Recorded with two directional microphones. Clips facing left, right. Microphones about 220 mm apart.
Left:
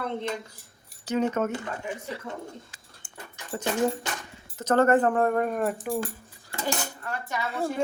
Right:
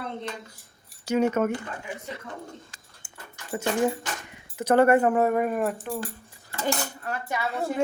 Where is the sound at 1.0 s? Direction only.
10° right (ahead or behind).